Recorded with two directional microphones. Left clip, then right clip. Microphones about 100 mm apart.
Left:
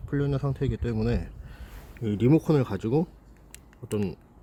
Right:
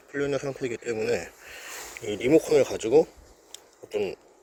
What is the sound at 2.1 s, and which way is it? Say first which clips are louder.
Speech: right 3 dB; 25° left (ahead or behind).